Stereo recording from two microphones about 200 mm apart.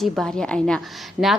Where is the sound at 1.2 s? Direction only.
40° left (ahead or behind).